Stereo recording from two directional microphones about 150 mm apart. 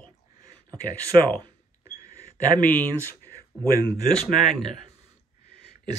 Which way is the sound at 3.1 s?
15° left (ahead or behind).